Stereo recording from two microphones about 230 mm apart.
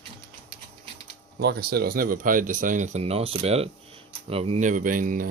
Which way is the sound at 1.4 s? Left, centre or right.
Right.